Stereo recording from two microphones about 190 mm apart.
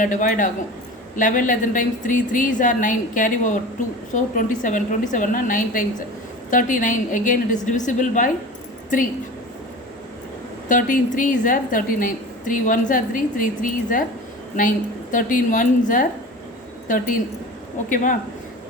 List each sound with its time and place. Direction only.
0.0 s a woman's voice: 45° left (ahead or behind)
10.7 s a woman's voice: 45° left (ahead or behind)
15.1 s a woman's voice: 45° left (ahead or behind)
17.8 s a woman's voice: 45° left (ahead or behind)